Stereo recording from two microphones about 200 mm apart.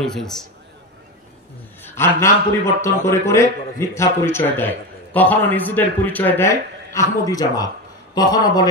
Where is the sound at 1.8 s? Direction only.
10° left (ahead or behind).